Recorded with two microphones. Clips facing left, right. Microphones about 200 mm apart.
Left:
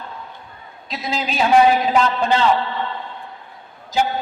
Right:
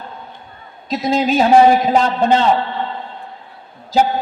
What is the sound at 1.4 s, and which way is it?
Speech, 35° right (ahead or behind).